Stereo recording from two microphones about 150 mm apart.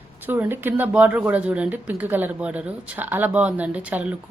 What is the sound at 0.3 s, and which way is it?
Speech, 15° right (ahead or behind).